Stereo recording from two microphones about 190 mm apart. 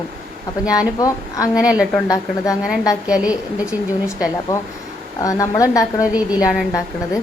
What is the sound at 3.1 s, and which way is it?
A woman's voice, 5° right (ahead or behind).